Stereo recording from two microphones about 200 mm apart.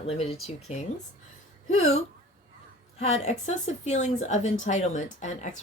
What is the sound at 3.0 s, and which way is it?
Speech, 35° left (ahead or behind).